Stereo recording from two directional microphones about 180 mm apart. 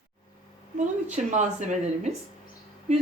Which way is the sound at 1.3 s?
40° right (ahead or behind).